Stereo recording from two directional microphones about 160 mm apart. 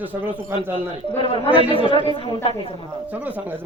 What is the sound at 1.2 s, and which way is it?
Speech, 35° left (ahead or behind).